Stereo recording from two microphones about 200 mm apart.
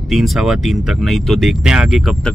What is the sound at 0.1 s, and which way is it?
Speech, centre (ahead or behind).